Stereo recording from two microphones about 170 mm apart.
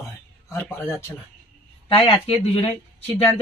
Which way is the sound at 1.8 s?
35° left (ahead or behind).